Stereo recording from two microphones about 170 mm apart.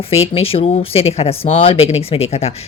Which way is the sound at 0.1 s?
35° left (ahead or behind).